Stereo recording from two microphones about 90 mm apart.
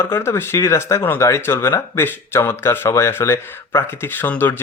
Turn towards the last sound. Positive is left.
turn(degrees=20)  # may be behind; listen again after turning